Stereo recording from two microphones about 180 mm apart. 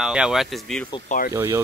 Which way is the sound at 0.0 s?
5° right (ahead or behind).